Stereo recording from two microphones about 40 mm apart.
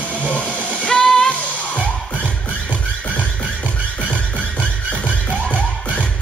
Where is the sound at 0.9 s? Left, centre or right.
Centre.